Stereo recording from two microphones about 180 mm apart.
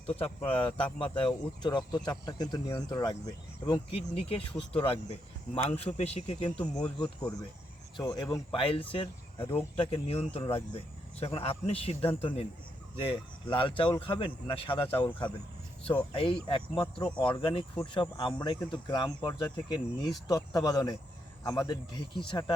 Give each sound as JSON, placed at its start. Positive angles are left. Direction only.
{"t": 0.2, "sound": "speech", "side_deg": 30}